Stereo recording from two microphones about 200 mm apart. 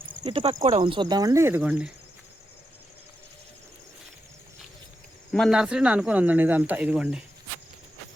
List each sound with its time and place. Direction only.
0.3 s speech: 30° right (ahead or behind); by 1.9 s 10° right (ahead or behind)
5.3 s speech: centre (ahead or behind)